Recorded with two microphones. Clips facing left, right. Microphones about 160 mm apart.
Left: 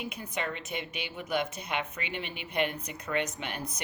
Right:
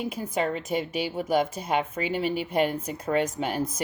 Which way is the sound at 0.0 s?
40° right (ahead or behind).